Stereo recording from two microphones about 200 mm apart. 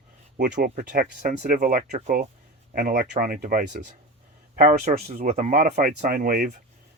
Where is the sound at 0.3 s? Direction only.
45° right (ahead or behind).